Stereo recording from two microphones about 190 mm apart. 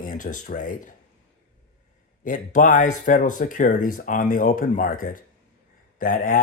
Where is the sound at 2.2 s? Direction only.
45° left (ahead or behind).